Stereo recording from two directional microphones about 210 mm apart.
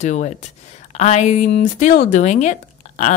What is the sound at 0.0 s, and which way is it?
Speech, 35° left (ahead or behind).